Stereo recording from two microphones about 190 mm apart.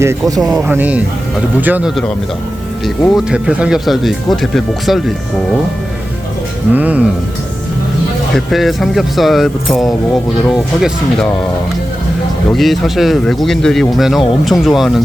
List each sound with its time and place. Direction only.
0.0 s speech: 15° right (ahead or behind)
0.5 s speech: 10° right (ahead or behind)
6.7 s speech: 5° right (ahead or behind)
8.3 s speech: centre (ahead or behind)
12.5 s speech: centre (ahead or behind)